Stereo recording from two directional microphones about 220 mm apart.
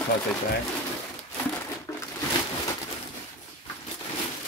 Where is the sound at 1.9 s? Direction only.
10° left (ahead or behind).